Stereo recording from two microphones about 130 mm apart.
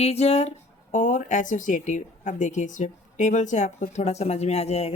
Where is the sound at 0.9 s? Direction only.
75° left (ahead or behind).